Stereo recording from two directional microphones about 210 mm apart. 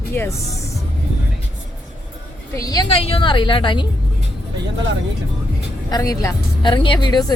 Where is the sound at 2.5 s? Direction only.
15° left (ahead or behind).